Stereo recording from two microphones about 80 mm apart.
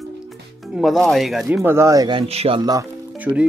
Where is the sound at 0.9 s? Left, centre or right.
Centre.